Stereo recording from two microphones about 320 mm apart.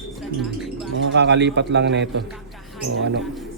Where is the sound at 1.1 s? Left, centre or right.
Right.